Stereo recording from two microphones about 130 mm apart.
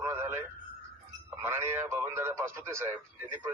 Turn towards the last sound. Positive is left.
turn(degrees=-20)  # may be behind; listen again after turning